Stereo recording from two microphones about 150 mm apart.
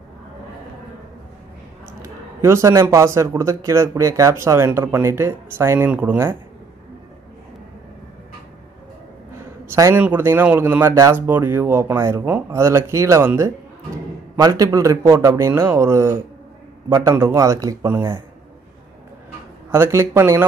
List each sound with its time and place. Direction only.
2.0 s speech: 20° right (ahead or behind)
9.7 s a man's voice: 15° right (ahead or behind)
19.7 s speech: 15° right (ahead or behind)